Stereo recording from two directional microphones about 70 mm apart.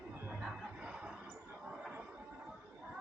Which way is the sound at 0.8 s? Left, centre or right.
Centre.